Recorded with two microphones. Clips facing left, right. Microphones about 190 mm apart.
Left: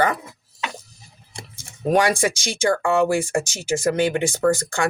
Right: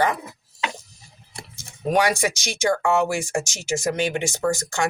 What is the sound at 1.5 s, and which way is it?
Speech, 50° left (ahead or behind).